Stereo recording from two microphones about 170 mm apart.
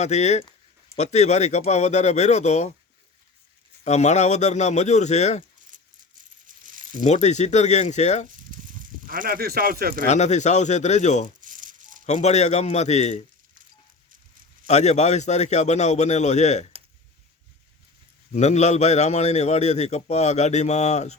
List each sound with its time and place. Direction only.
0.0 s a man's voice: 40° left (ahead or behind)
3.8 s speech: 40° left (ahead or behind)
5.7 s coin: 50° right (ahead or behind)
7.0 s speech: 40° left (ahead or behind)
8.3 s a sound: 50° right (ahead or behind)
9.0 s speech: 55° right (ahead or behind)
10.1 s speech: 45° left (ahead or behind)
11.3 s rattle: 50° right (ahead or behind)
12.0 s a man's voice: 40° left (ahead or behind)
14.1 s a sound: 55° right (ahead or behind)
14.7 s speech: 40° left (ahead or behind)
18.3 s a man's voice: 40° left (ahead or behind)